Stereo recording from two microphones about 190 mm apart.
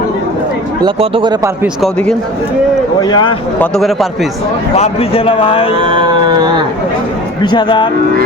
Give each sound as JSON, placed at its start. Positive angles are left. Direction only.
{"t": 0.8, "sound": "a sound", "side_deg": -25}
{"t": 1.6, "sound": "a man's voice", "side_deg": 0}
{"t": 3.0, "sound": "speech", "side_deg": 20}
{"t": 3.6, "sound": "a man's voice", "side_deg": 0}
{"t": 4.7, "sound": "speech", "side_deg": 30}
{"t": 5.7, "sound": "a sound", "side_deg": -25}
{"t": 7.4, "sound": "speech", "side_deg": 25}